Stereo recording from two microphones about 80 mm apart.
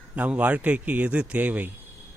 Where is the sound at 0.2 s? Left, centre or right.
Centre.